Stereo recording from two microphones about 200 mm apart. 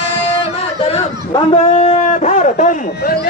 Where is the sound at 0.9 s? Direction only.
35° left (ahead or behind).